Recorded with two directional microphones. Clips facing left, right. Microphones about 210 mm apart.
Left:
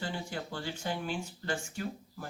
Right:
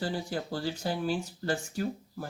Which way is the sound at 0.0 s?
35° right (ahead or behind).